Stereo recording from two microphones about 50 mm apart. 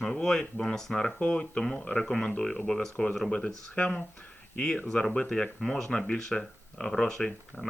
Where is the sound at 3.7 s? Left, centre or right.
Left.